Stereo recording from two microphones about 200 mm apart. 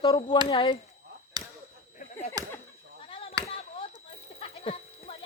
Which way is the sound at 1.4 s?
20° right (ahead or behind).